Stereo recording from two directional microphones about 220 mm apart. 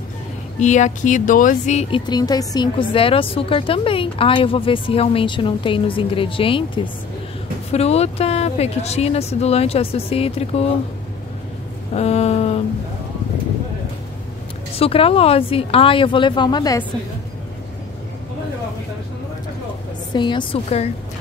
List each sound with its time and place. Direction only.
0.6 s speech: 30° left (ahead or behind)
11.9 s speech: 30° left (ahead or behind)
14.8 s speech: 25° left (ahead or behind)
20.1 s speech: 20° left (ahead or behind)